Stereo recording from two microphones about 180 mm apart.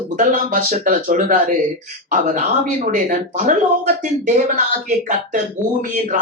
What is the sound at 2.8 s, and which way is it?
Speech, 45° right (ahead or behind).